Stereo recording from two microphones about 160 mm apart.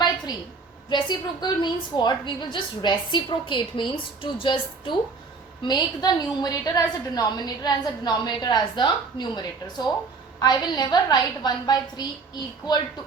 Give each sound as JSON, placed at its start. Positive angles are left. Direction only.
{"t": 0.9, "sound": "a woman's voice", "side_deg": 30}